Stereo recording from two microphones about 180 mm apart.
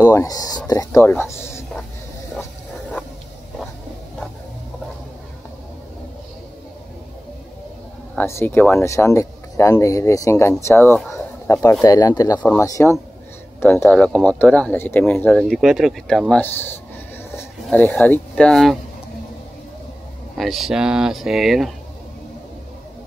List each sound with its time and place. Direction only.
0.0 s speech: 15° left (ahead or behind)
8.2 s speech: 15° left (ahead or behind)
11.1 s a sound: 15° left (ahead or behind)
11.8 s speech: 20° left (ahead or behind); by 18.8 s centre (ahead or behind)
20.3 s speech: centre (ahead or behind)